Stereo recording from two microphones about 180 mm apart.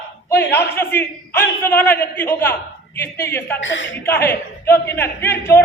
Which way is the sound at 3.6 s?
90° left.